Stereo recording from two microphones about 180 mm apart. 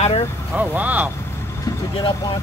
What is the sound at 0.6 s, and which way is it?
Speech, 10° right (ahead or behind).